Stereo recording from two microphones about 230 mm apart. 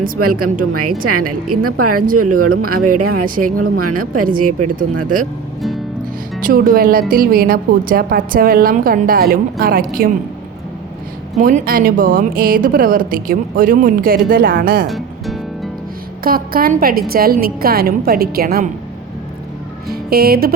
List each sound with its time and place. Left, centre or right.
0.2 s speech: right
6.4 s a woman's voice: right
11.3 s a woman's voice: right
14.8 s music: centre
16.2 s a woman's voice: right
19.9 s speech: right